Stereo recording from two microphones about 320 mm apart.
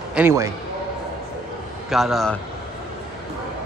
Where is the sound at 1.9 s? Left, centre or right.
Centre.